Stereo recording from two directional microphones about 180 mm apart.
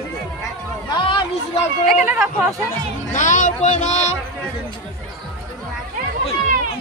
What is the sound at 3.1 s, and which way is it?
Speech, 45° left (ahead or behind).